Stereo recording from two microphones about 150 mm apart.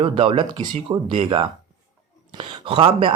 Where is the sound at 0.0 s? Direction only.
35° right (ahead or behind).